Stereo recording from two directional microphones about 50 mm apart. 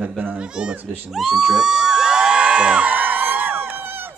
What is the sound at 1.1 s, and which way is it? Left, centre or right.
Crowd, centre.